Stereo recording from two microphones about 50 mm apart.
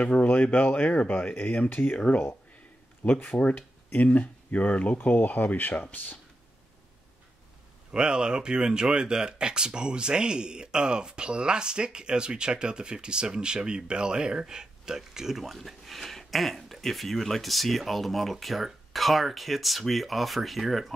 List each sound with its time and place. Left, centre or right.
0.0 s speech: left
3.1 s speech: left
7.9 s speech: centre